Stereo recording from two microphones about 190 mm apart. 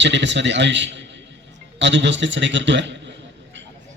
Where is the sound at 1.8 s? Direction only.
70° right (ahead or behind).